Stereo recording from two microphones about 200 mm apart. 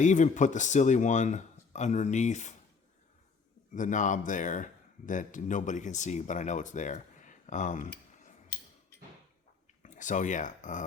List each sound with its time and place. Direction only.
0.0 s speech: 40° left (ahead or behind)
3.8 s speech: 40° left (ahead or behind)
9.8 s speech: 40° left (ahead or behind)